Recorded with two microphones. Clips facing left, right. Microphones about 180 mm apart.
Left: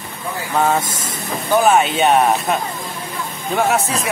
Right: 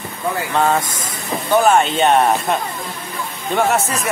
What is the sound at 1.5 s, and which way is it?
Speech, centre (ahead or behind).